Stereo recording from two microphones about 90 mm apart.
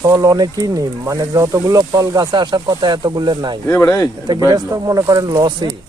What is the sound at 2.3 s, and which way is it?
Speech, 55° right (ahead or behind).